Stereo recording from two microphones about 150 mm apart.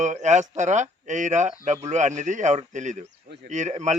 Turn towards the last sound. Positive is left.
turn(degrees=-50)  # may be behind; listen again after turning